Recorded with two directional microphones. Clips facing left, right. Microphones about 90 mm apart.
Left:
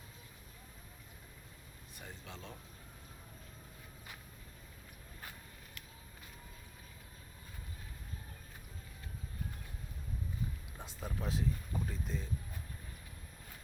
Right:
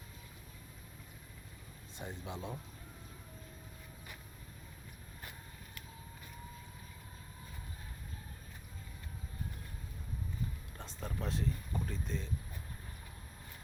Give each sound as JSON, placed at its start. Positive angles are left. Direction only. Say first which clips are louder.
{"t": 2.0, "sound": "speech", "louder": "right 7 dB", "side_deg": -20}
{"t": 10.8, "sound": "speech", "louder": "right 1 dB", "side_deg": 5}